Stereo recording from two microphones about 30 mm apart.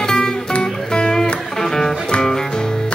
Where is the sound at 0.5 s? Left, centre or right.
Left.